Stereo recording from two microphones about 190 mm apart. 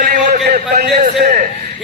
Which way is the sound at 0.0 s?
40° right (ahead or behind).